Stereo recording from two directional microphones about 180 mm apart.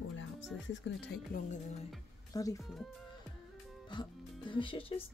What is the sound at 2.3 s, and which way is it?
Speech, 20° left (ahead or behind).